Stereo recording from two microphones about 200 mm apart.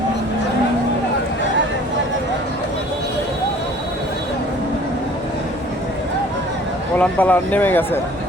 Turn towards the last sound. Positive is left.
turn(degrees=10)  # may be behind; listen again after turning